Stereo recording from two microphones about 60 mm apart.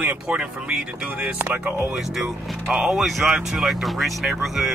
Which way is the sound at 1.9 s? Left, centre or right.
Centre.